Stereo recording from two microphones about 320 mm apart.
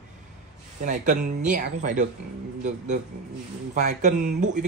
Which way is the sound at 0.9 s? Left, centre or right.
Right.